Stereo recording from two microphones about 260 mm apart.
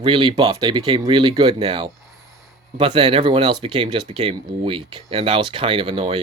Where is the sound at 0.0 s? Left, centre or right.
Centre.